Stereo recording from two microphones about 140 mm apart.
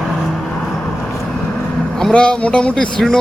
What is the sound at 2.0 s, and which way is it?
A man's voice, 5° left (ahead or behind).